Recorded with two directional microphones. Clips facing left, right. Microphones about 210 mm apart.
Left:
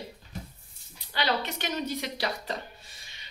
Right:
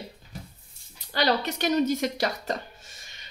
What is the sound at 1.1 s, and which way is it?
Speech, 40° right (ahead or behind).